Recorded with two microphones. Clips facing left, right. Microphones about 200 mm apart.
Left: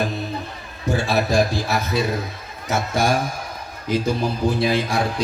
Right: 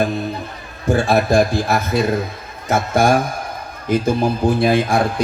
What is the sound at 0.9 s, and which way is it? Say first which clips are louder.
A man's voice: right 4 dB; 50° right (ahead or behind).